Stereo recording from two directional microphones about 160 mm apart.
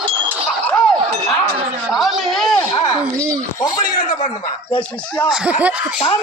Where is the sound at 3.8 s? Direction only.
55° left (ahead or behind).